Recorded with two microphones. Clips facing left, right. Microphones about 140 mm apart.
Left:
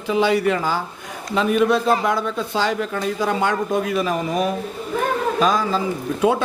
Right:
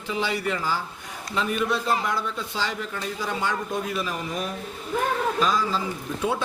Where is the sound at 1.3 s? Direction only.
75° left (ahead or behind); by 2.2 s 90° left.